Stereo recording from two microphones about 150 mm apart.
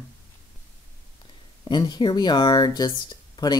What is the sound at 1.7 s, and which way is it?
Speech, 30° left (ahead or behind).